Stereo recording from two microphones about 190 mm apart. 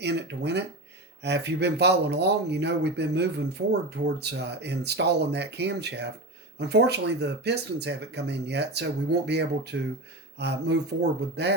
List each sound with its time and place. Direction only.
0.0 s speech: 65° right (ahead or behind)